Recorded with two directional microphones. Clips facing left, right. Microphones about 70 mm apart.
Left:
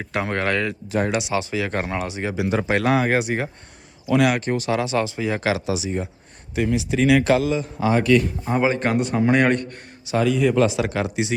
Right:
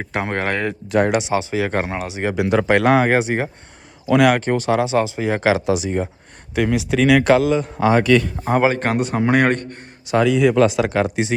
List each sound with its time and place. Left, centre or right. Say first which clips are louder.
0.0 s speech: right 1 dB; right
0.9 s a man's voice: right 5 dB; right
1.3 s speech: right 4 dB; right
2.3 s speech: right 6 dB; right
2.7 s speech: right 4 dB; right
4.8 s speech: right 4 dB; right
5.3 s a man's voice: right 8 dB; right
6.6 s speech: right 3 dB; right
7.9 s a man's voice: right 3 dB; right
8.7 s a man's voice: right 1 dB; right
10.2 s a man's voice: right 4 dB; right